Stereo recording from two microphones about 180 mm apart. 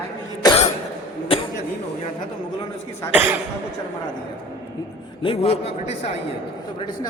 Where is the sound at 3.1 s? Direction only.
10° right (ahead or behind).